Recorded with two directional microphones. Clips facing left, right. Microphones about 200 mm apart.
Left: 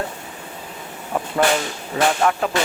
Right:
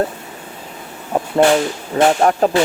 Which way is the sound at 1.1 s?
30° right (ahead or behind).